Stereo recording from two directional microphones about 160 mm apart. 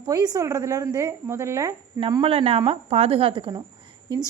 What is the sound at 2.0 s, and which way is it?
A woman's voice, 30° right (ahead or behind).